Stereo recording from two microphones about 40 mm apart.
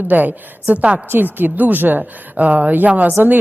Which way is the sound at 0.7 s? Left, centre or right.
Right.